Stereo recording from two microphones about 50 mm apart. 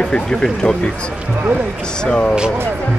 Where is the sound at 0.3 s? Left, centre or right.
Centre.